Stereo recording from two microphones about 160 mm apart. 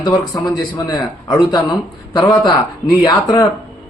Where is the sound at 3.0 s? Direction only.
30° left (ahead or behind).